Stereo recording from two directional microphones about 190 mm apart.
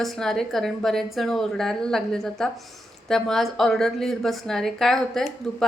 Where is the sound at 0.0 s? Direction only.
Centre (ahead or behind).